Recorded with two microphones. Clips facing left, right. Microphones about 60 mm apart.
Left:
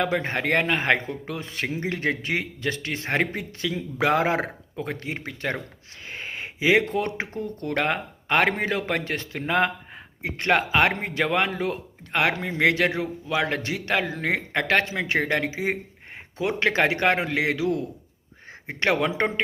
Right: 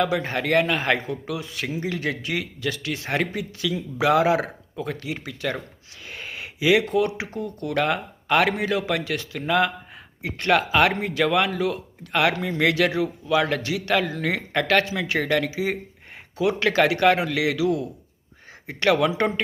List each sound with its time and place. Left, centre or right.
0.0 s speech: left
6.1 s a sound: left
6.9 s speech: left